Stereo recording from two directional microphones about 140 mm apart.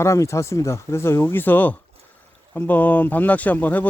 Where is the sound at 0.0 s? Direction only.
20° left (ahead or behind).